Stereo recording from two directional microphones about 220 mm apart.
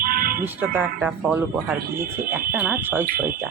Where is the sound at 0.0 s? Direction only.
40° right (ahead or behind).